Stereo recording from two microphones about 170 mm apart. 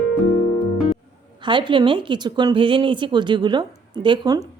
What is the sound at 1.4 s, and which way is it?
Speech, 30° right (ahead or behind).